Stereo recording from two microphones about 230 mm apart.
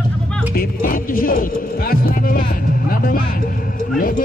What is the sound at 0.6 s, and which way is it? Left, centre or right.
Speech, left.